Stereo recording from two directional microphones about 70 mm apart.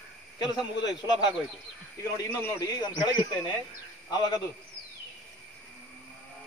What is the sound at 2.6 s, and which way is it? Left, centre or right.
Speech, left.